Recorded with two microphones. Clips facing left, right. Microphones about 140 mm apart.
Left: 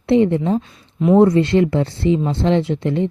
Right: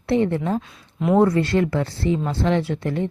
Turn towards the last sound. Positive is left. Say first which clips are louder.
# left 5 dB
turn(degrees=20)  # may be behind; listen again after turning